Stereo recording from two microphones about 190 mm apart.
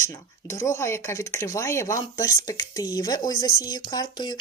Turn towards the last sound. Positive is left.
turn(degrees=20)  # may be behind; listen again after turning